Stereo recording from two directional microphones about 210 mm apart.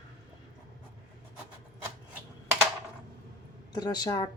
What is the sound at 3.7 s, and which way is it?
Speech, 20° left (ahead or behind).